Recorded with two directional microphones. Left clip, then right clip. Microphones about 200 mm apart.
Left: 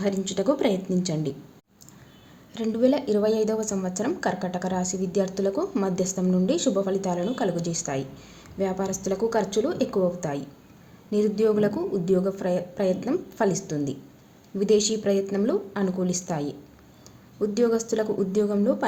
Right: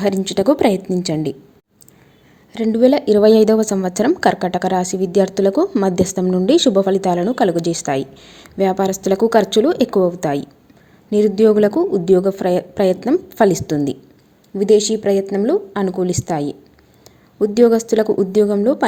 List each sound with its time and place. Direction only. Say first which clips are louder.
0.0 s speech: right 9 dB; 35° right (ahead or behind)
2.5 s speech: right 9 dB; 30° right (ahead or behind)